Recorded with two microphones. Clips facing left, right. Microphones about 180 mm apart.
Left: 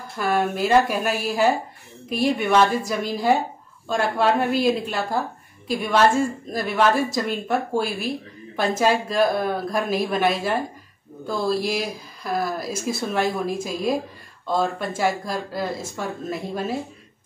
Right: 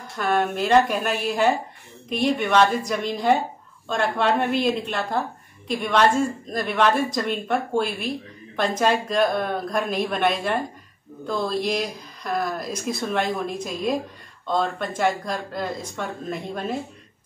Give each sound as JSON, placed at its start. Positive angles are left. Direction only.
{"t": 0.2, "sound": "a woman's voice", "side_deg": 5}